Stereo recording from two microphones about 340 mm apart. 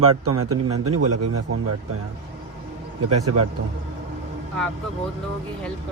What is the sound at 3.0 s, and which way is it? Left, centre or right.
Speech, right.